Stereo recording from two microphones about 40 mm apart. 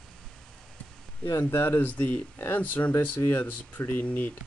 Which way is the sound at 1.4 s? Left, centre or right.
Left.